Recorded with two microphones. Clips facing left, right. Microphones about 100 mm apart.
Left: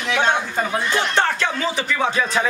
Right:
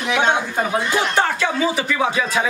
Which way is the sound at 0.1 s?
10° right (ahead or behind).